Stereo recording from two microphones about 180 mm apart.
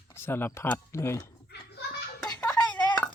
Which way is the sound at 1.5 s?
65° left (ahead or behind).